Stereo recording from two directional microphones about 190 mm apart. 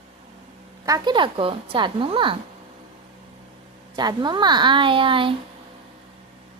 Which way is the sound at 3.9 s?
20° right (ahead or behind).